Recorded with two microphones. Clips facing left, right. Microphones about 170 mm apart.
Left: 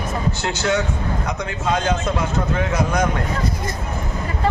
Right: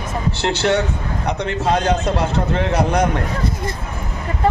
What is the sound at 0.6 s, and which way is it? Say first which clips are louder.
A man's voice: right 1 dB; 30° right (ahead or behind).